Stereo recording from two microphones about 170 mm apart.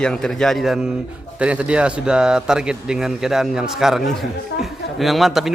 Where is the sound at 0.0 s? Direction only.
5° left (ahead or behind).